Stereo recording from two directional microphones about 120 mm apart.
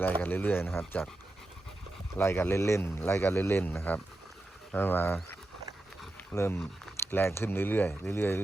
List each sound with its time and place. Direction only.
0.0 s speech: 15° left (ahead or behind)
2.1 s speech: 20° left (ahead or behind)